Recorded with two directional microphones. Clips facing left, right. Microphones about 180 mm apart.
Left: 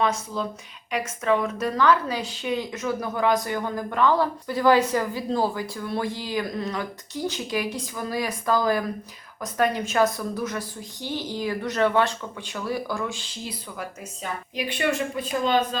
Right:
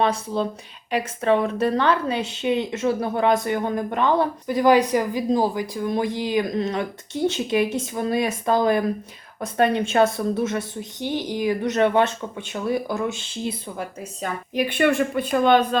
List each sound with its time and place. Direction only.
0.0 s a woman's voice: 30° right (ahead or behind)
14.2 s speech: 50° right (ahead or behind)